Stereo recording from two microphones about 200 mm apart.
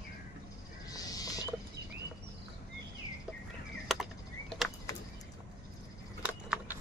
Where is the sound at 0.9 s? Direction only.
20° left (ahead or behind).